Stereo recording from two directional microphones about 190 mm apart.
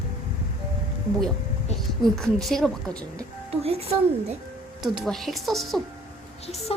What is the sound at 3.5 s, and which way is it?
Speech, 30° right (ahead or behind).